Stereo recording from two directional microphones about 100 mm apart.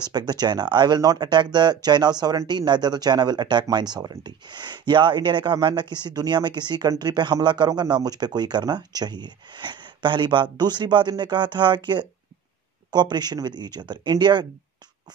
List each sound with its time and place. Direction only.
0.1 s speech: 45° right (ahead or behind)